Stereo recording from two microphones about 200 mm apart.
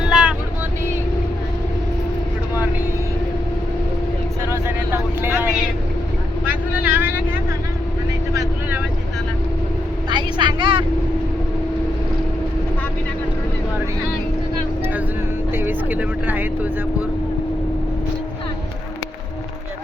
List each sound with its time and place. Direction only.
0.1 s vehicle: 5° right (ahead or behind)
4.5 s vehicle: 10° right (ahead or behind)
8.3 s vehicle: 15° right (ahead or behind)
10.1 s vehicle: 20° right (ahead or behind)
15.5 s vehicle: 10° right (ahead or behind)